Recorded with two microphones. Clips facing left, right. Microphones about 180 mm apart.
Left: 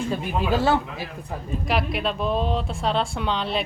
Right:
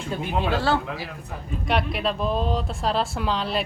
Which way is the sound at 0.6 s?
20° left (ahead or behind).